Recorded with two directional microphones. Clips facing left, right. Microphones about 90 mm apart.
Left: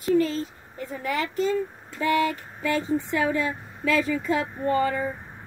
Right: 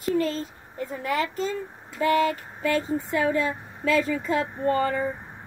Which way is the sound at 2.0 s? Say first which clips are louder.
Right 1 dB; 45° right (ahead or behind).